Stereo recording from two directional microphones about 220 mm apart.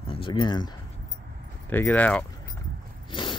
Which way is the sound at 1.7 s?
10° left (ahead or behind).